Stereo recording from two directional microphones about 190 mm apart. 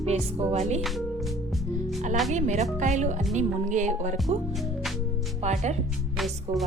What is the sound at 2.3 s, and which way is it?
Speech, 35° right (ahead or behind).